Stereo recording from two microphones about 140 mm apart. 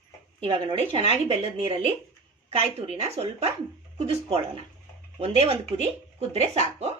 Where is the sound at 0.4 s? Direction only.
40° right (ahead or behind).